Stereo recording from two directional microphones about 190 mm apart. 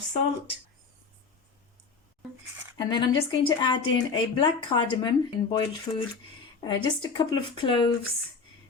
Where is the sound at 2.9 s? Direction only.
25° left (ahead or behind).